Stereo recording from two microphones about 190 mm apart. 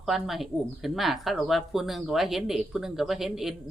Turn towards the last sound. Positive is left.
turn(degrees=0)  # may be behind; listen again after turning